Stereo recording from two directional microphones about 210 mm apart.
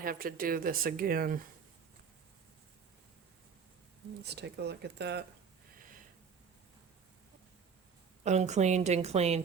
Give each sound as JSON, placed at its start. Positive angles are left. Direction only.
{"t": 0.0, "sound": "speech", "side_deg": -45}
{"t": 4.2, "sound": "speech", "side_deg": -50}
{"t": 8.2, "sound": "a woman's voice", "side_deg": -35}